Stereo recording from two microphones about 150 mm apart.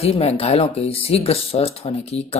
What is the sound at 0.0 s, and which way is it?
Speech, 40° left (ahead or behind).